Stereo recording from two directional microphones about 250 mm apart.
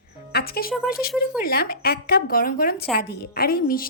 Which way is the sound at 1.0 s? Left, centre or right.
Left.